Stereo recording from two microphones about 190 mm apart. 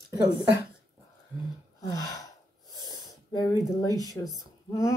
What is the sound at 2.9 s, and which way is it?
Wheeze, 20° left (ahead or behind).